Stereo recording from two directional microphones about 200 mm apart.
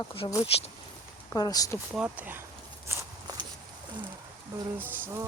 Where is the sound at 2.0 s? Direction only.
10° right (ahead or behind).